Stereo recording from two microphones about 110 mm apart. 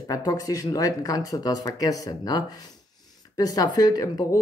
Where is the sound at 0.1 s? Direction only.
35° left (ahead or behind).